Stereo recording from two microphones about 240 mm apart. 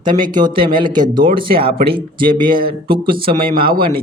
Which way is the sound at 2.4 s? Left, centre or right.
Right.